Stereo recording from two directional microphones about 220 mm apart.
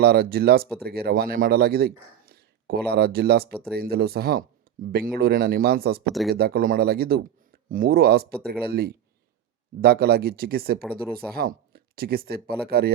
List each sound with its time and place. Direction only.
0.0 s a man's voice: 45° right (ahead or behind)
6.1 s speech: centre (ahead or behind)
6.3 s a man's voice: 45° right (ahead or behind)